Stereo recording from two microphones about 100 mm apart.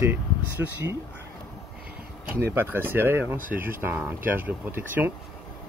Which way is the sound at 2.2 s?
20° right (ahead or behind).